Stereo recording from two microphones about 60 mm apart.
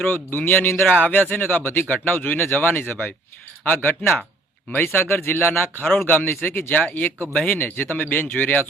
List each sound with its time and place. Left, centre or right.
0.1 s speech: left
0.9 s speech: left
1.1 s speech: left